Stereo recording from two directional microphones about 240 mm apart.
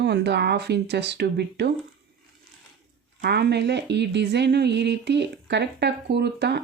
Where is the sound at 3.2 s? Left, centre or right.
Right.